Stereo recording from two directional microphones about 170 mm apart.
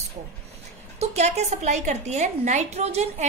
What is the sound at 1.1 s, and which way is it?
A woman's voice, 40° right (ahead or behind).